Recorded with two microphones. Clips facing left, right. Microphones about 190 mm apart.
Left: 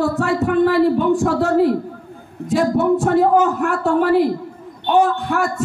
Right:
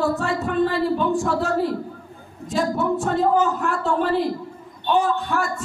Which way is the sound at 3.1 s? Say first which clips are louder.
Left 2 dB; 65° left (ahead or behind).